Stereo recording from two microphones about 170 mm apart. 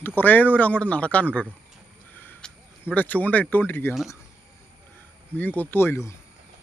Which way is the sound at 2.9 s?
10° left (ahead or behind).